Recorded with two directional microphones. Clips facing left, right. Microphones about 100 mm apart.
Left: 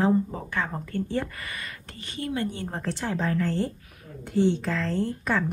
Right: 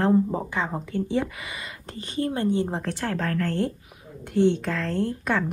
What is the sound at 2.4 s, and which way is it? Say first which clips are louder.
Speech: right 9 dB; 25° right (ahead or behind).